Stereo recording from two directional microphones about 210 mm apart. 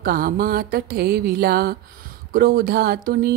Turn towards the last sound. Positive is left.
turn(degrees=-45)  # may be behind; listen again after turning